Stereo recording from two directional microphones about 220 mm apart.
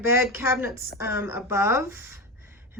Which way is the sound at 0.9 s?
10° right (ahead or behind).